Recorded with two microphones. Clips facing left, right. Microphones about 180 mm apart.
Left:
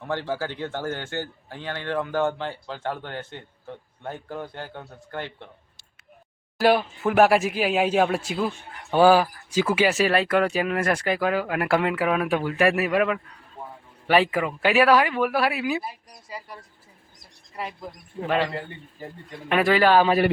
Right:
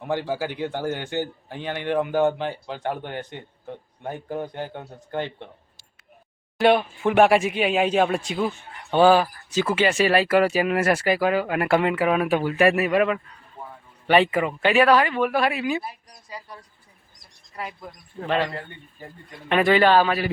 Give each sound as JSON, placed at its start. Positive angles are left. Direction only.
{"t": 0.0, "sound": "speech", "side_deg": -15}
{"t": 6.6, "sound": "speech", "side_deg": 0}
{"t": 18.2, "sound": "speech", "side_deg": 0}